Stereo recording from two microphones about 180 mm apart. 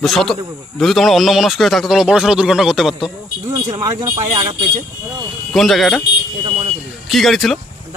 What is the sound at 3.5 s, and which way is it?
Speech, 20° right (ahead or behind).